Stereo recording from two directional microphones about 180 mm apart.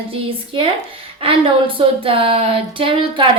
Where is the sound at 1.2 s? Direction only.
30° right (ahead or behind).